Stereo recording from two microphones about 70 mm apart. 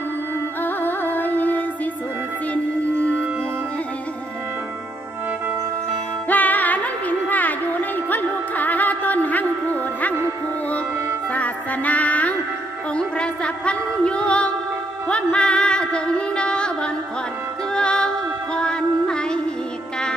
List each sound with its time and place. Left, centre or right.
0.6 s music: left
6.2 s music: left
11.3 s music: centre